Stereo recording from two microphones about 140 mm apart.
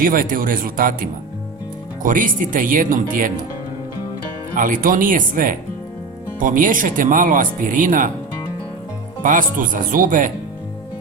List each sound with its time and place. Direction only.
0.0 s speech: 85° right
2.0 s speech: 70° right (ahead or behind)
4.5 s speech: 75° right (ahead or behind)
9.2 s speech: 70° right (ahead or behind)